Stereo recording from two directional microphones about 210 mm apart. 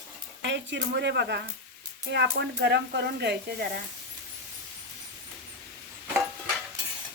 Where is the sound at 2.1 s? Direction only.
55° right (ahead or behind).